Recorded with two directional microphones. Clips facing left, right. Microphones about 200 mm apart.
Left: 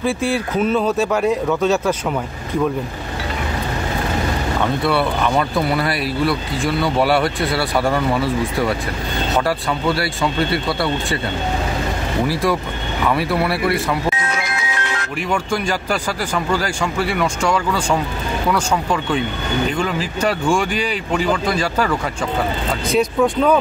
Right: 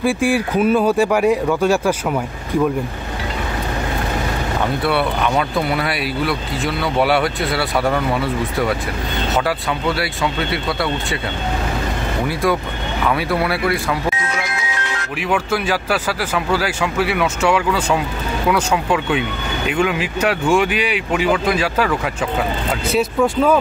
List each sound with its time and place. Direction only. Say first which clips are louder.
0.0 s speech: right 2 dB; 10° right (ahead or behind)
4.8 s speech: even; centre (ahead or behind)
9.8 s speech: left 1 dB; centre (ahead or behind)
12.3 s speech: right 3 dB; centre (ahead or behind)
14.6 s music: left 1 dB; 55° left (ahead or behind)
15.2 s speech: right 2 dB; 5° right (ahead or behind)